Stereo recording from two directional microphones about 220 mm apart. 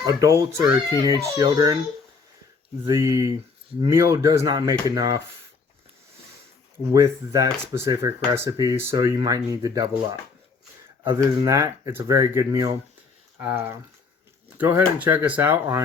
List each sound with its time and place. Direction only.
0.0 s speech: 15° right (ahead or behind)
2.8 s speech: 15° right (ahead or behind)
6.9 s speech: 15° right (ahead or behind)